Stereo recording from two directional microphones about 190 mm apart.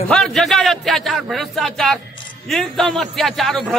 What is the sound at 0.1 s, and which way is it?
A man's voice, centre (ahead or behind).